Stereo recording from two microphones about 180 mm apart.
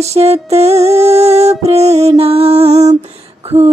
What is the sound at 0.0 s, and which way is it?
Music, 35° right (ahead or behind).